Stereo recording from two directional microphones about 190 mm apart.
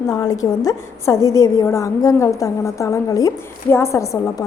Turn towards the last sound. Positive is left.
turn(degrees=15)  # may be behind; listen again after turning